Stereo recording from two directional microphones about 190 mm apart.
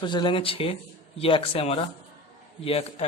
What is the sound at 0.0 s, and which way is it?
Speech, 25° left (ahead or behind).